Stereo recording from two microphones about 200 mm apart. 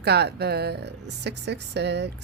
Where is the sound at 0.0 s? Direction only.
55° right (ahead or behind).